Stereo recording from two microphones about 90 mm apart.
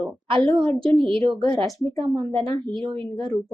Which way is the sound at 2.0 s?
80° right.